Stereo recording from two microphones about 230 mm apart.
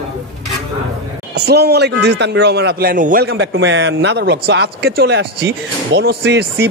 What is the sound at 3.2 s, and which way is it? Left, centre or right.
A man's voice, right.